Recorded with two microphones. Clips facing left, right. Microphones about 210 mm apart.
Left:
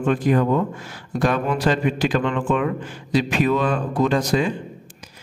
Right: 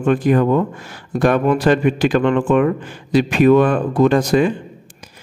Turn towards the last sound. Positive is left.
turn(degrees=-55)  # may be behind; listen again after turning